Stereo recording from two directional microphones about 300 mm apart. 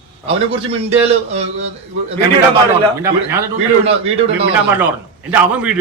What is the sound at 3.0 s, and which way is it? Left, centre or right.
Speech, centre.